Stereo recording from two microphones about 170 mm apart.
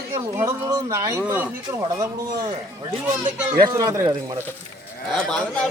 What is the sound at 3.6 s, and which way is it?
Speech, 20° right (ahead or behind).